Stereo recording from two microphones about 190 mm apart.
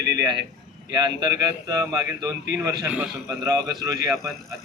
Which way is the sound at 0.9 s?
20° right (ahead or behind).